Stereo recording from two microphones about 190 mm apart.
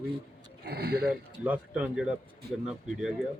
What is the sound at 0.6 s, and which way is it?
Speech, 60° right (ahead or behind).